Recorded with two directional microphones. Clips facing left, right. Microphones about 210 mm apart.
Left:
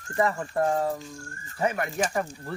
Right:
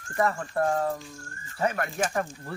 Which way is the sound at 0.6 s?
15° left (ahead or behind).